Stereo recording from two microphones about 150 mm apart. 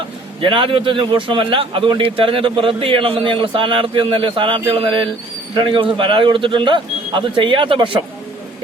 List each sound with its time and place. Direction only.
0.4 s a man's voice: 35° right (ahead or behind)